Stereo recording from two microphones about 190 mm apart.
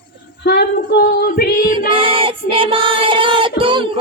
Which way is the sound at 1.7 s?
25° right (ahead or behind).